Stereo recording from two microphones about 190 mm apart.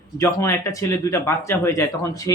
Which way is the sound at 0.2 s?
15° left (ahead or behind).